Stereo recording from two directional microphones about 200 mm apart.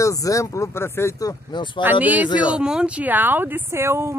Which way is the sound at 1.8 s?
10° right (ahead or behind).